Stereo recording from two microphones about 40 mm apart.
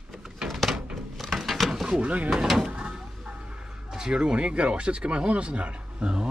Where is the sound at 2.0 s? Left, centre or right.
Right.